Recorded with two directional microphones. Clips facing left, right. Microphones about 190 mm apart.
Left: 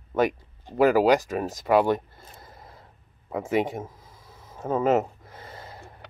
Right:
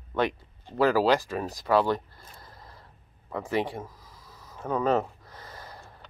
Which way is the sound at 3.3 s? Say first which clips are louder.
Left 4 dB; 20° left (ahead or behind).